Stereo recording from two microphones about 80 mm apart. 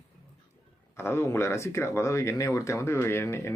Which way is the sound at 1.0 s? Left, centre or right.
Left.